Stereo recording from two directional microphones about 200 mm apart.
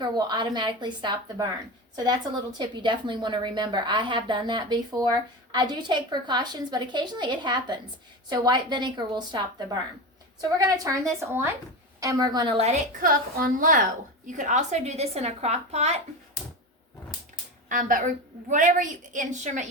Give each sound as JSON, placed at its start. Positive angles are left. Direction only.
{"t": 0.0, "sound": "a woman's voice", "side_deg": -20}
{"t": 17.7, "sound": "a woman's voice", "side_deg": -40}